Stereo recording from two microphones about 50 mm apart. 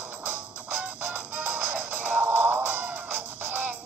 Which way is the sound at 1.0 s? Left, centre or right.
Right.